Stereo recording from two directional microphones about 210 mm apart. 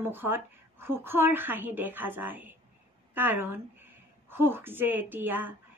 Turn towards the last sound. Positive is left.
turn(degrees=-10)  # may be behind; listen again after turning